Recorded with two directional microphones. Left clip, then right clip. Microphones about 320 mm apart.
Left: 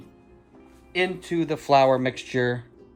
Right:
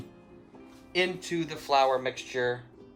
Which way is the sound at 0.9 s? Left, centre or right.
Centre.